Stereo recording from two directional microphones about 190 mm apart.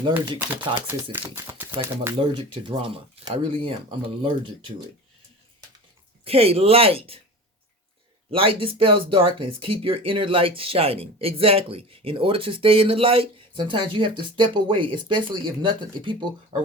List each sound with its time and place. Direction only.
0.1 s speech: 10° right (ahead or behind)
2.0 s speech: 25° right (ahead or behind)
6.2 s speech: 30° right (ahead or behind)
8.3 s speech: 30° right (ahead or behind)